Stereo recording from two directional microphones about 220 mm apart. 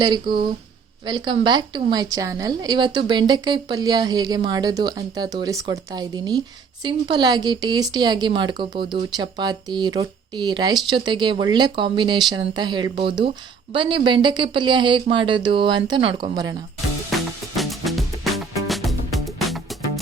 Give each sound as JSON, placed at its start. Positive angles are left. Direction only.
{"t": 0.0, "sound": "a woman's voice", "side_deg": -20}
{"t": 17.6, "sound": "music", "side_deg": 0}